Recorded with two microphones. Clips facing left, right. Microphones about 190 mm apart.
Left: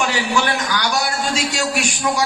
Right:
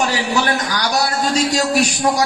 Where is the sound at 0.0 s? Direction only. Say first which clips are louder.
Right 1 dB; 40° right (ahead or behind).